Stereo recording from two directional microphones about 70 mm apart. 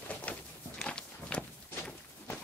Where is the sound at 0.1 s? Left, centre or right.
Left.